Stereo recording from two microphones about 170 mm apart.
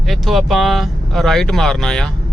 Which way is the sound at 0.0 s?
Centre (ahead or behind).